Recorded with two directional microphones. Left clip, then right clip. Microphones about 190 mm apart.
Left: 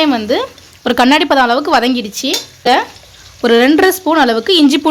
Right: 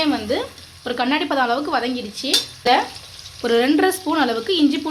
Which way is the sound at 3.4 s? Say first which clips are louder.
Left 8 dB; 45° left (ahead or behind).